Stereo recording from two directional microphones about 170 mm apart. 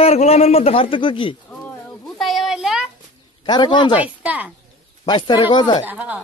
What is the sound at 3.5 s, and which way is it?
Speech, 25° left (ahead or behind).